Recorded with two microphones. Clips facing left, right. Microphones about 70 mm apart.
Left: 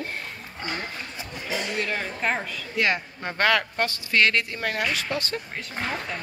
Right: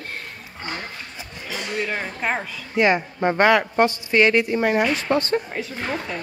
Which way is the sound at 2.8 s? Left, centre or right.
Right.